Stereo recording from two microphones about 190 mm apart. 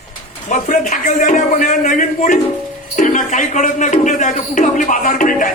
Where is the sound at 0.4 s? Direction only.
40° left (ahead or behind).